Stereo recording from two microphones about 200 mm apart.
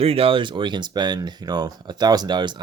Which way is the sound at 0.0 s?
30° right (ahead or behind).